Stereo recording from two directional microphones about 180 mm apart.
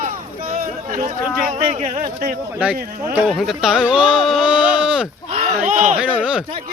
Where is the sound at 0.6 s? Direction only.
45° right (ahead or behind).